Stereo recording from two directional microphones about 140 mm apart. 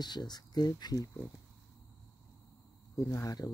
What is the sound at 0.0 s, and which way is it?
Speech, 30° left (ahead or behind).